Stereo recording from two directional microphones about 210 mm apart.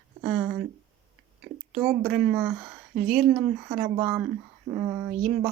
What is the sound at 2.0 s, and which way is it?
Speech, 5° right (ahead or behind).